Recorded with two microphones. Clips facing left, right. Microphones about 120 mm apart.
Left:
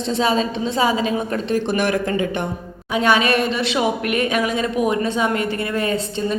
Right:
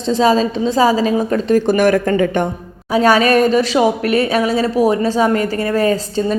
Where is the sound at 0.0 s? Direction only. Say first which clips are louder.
Right 6 dB; 35° right (ahead or behind).